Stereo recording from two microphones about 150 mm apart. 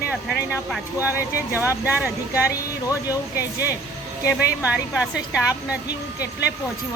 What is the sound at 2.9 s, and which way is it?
Speech, 20° left (ahead or behind).